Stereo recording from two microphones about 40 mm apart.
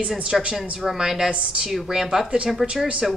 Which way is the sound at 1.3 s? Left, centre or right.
Right.